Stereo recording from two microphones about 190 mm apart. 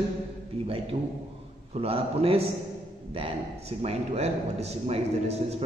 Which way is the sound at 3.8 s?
35° right (ahead or behind).